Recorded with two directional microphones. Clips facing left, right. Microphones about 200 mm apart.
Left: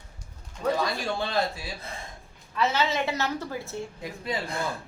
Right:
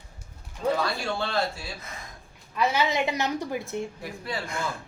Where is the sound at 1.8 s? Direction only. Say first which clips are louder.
Left 3 dB; 30° left (ahead or behind).